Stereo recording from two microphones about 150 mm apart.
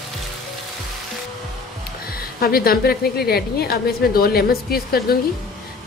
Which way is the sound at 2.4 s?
90° left.